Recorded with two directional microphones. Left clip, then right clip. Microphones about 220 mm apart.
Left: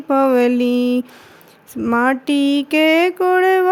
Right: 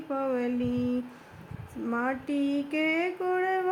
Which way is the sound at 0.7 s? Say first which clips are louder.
Left 14 dB; 25° left (ahead or behind).